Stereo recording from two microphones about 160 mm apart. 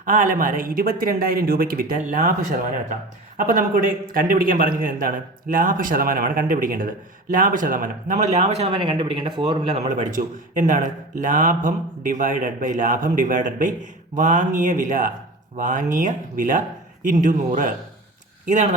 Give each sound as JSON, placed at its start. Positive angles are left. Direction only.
{"t": 0.0, "sound": "a man's voice", "side_deg": -55}
{"t": 3.3, "sound": "a man's voice", "side_deg": -60}